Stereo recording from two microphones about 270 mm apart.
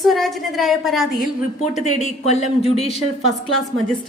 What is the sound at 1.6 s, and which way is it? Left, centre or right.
Speech, left.